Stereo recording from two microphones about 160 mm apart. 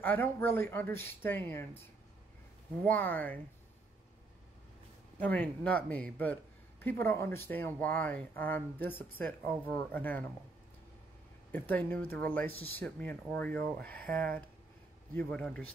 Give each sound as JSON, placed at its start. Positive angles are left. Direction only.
{"t": 0.0, "sound": "speech", "side_deg": 10}
{"t": 2.8, "sound": "speech", "side_deg": 10}
{"t": 5.2, "sound": "speech", "side_deg": 10}
{"t": 11.5, "sound": "speech", "side_deg": 10}